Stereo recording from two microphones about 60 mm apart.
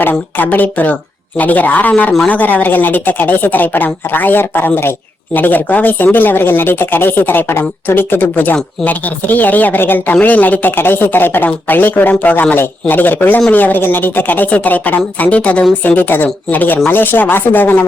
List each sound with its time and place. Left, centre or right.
0.0 s speech: left